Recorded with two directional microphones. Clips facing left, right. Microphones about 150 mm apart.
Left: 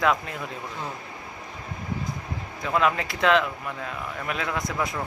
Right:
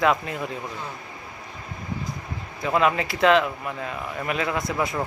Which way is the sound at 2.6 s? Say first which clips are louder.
Right 2 dB; 5° right (ahead or behind).